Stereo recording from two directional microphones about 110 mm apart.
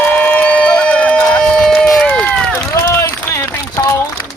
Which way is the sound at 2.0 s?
10° left (ahead or behind).